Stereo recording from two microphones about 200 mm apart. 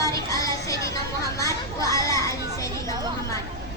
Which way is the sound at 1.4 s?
15° left (ahead or behind).